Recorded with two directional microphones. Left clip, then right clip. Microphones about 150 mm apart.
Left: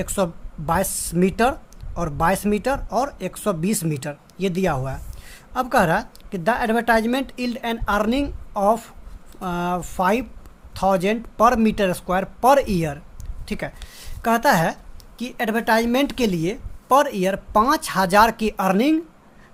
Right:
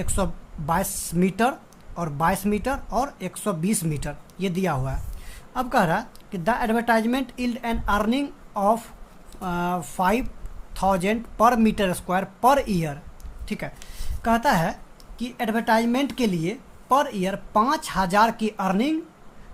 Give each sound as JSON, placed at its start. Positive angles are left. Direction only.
{"t": 0.0, "sound": "a woman's voice", "side_deg": 35}